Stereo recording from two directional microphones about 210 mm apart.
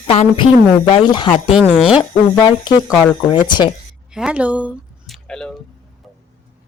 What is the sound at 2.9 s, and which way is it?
Speech, 10° left (ahead or behind).